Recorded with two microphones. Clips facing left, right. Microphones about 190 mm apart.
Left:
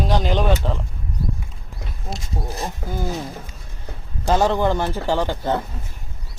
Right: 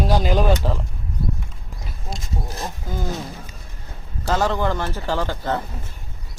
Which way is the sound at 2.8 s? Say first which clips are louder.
Left 2 dB; 60° left (ahead or behind).